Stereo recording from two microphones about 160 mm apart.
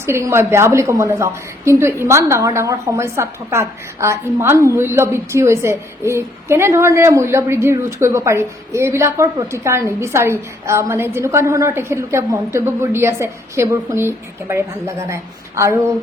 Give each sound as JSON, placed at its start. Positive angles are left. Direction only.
{"t": 0.0, "sound": "a woman's voice", "side_deg": -15}